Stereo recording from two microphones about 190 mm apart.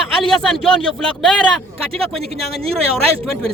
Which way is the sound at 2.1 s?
30° right (ahead or behind).